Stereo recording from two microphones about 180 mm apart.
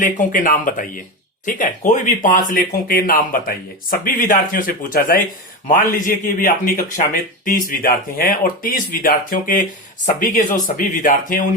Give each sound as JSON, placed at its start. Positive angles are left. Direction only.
{"t": 0.0, "sound": "speech", "side_deg": 45}